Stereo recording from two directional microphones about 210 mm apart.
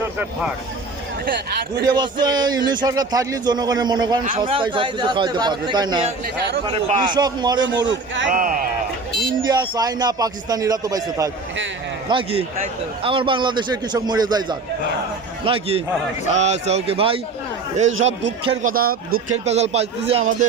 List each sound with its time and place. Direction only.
1.2 s speech: 50° right (ahead or behind)
1.8 s a man's voice: 20° right (ahead or behind)
7.7 s a man's voice: 60° right (ahead or behind)
8.3 s a man's voice: 40° right (ahead or behind)
9.4 s a man's voice: 20° right (ahead or behind)
18.6 s speech: 45° right (ahead or behind)
19.5 s a man's voice: 30° right (ahead or behind)